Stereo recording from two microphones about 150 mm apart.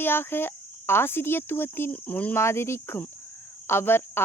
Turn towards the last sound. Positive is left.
turn(degrees=15)  # may be behind; listen again after turning